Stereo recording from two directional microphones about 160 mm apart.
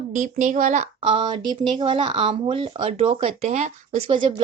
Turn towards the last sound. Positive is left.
turn(degrees=-35)  # may be behind; listen again after turning